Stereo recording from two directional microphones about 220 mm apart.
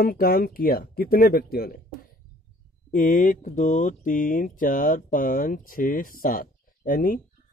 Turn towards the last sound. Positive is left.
turn(degrees=40)  # may be behind; listen again after turning